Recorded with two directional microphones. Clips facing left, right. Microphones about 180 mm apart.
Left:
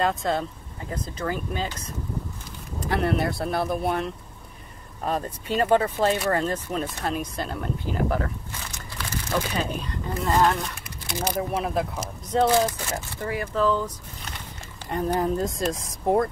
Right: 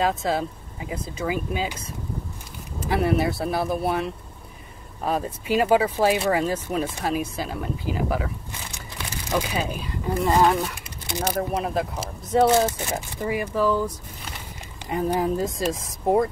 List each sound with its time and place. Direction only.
0.0 s speech: 5° right (ahead or behind)
2.8 s speech: 5° right (ahead or behind)
8.9 s a sound: 15° right (ahead or behind)
10.2 s speech: 5° right (ahead or behind)
10.7 s speech: 15° right (ahead or behind)
11.5 s speech: centre (ahead or behind)
12.4 s speech: 20° right (ahead or behind); by 16.3 s centre (ahead or behind)